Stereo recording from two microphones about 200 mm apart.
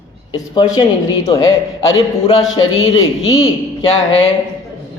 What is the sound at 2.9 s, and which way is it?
Speech, 20° left (ahead or behind).